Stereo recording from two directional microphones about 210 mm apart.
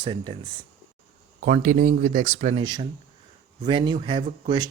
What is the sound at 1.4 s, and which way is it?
Speech, 40° right (ahead or behind).